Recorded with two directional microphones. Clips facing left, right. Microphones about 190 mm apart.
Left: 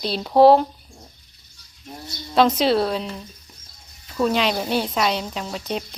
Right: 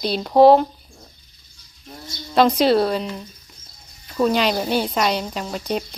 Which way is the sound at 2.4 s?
Centre (ahead or behind).